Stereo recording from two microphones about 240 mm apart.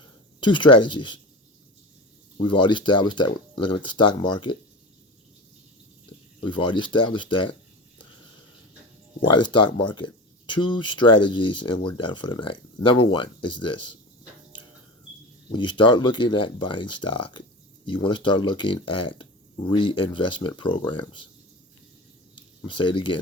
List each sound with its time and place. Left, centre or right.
0.0 s speech: centre
2.4 s speech: centre
6.4 s speech: centre
9.3 s speech: centre
15.5 s speech: centre
22.4 s a sound: left